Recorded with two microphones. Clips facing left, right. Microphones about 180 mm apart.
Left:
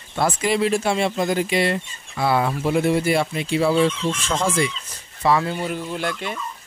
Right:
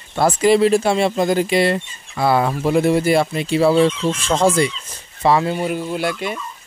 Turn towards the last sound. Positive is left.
turn(degrees=-10)  # may be behind; listen again after turning